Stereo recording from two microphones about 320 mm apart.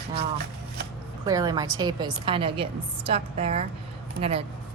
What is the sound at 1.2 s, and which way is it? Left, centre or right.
A woman's voice, centre.